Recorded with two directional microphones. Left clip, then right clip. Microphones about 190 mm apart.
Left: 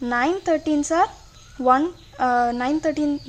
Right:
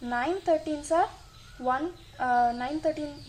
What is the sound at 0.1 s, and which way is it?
A woman's voice, 40° left (ahead or behind).